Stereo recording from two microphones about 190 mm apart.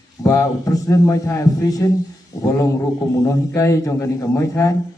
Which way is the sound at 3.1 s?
15° left (ahead or behind).